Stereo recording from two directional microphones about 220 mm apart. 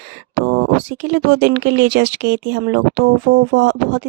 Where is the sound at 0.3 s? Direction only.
60° right (ahead or behind).